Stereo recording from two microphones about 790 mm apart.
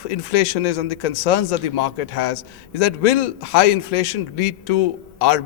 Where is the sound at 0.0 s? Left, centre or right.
Left.